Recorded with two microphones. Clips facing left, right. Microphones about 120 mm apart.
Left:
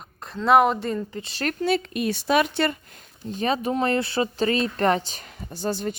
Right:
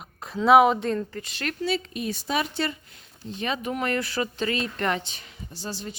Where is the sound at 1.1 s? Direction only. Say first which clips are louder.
Left 4 dB; 30° left (ahead or behind).